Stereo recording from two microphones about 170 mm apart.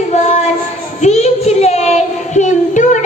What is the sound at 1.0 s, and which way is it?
Child singing, 40° left (ahead or behind).